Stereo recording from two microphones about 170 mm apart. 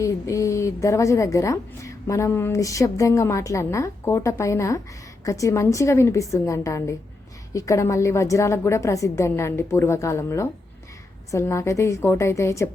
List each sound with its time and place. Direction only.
0.0 s a woman's voice: 20° left (ahead or behind)